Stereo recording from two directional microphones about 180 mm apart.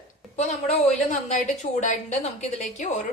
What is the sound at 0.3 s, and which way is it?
A woman's voice, 40° left (ahead or behind).